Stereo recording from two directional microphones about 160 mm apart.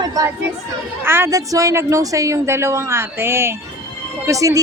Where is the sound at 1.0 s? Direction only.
15° right (ahead or behind).